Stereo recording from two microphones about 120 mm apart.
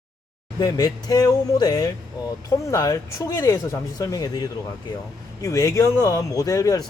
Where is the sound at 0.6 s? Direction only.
35° left (ahead or behind).